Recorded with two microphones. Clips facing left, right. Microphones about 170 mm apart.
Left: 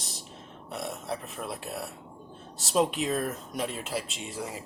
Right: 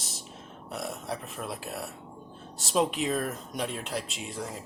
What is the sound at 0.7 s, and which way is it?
Speech, centre (ahead or behind).